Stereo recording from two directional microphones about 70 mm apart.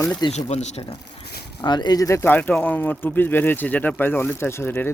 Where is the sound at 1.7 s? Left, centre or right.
Left.